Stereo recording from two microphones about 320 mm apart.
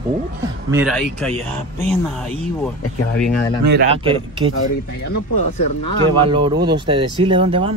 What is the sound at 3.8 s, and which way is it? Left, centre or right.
Speech, centre.